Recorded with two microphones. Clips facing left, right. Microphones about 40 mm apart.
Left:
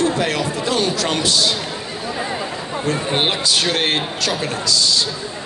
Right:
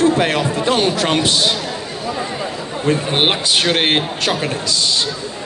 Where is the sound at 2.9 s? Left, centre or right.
Right.